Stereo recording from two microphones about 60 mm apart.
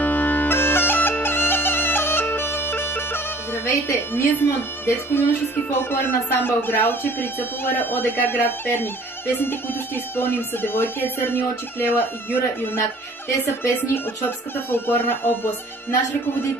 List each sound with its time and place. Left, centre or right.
0.0 s bagpipes: left
5.7 s speech: left